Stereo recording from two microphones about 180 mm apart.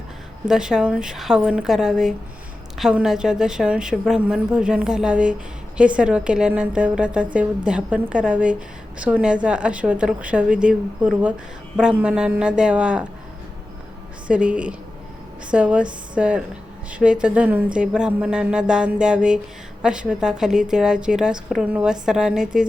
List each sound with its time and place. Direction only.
0.4 s a woman's voice: 5° right (ahead or behind)
14.3 s a woman's voice: 5° right (ahead or behind)